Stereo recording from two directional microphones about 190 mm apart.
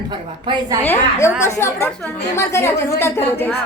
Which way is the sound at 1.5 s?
15° left (ahead or behind).